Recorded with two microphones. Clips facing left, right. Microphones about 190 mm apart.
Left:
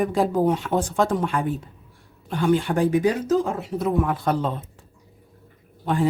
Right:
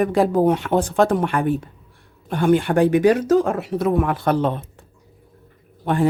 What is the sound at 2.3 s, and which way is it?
Speech, 55° right (ahead or behind).